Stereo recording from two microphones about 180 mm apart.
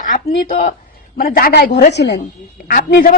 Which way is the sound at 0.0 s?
50° left (ahead or behind).